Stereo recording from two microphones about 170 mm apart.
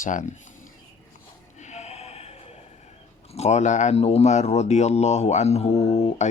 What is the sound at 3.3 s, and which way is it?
Speech, 40° left (ahead or behind).